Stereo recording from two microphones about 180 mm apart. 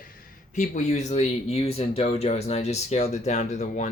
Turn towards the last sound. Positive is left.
turn(degrees=40)  # may be behind; listen again after turning